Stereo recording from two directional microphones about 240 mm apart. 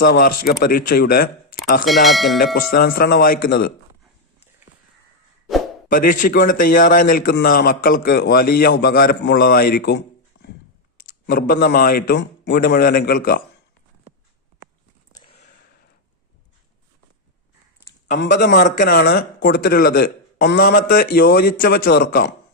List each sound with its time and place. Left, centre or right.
0.0 s a man's voice: left
1.8 s speech: centre
2.7 s a man's voice: left
5.9 s a man's voice: left
10.3 s a sound: left
10.9 s speech: left
15.1 s a sound: left
18.3 s a man's voice: left